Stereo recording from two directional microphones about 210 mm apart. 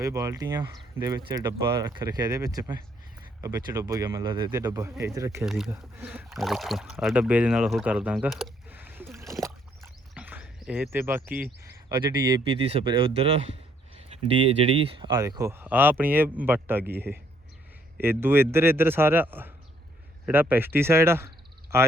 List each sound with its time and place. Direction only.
0.0 s speech: 15° right (ahead or behind)
5.5 s speech: centre (ahead or behind)
9.4 s a sound: 10° right (ahead or behind)
11.6 s speech: 15° right (ahead or behind)
15.1 s speech: 15° right (ahead or behind)